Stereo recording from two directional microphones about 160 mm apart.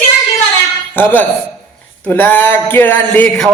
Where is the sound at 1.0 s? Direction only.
10° left (ahead or behind).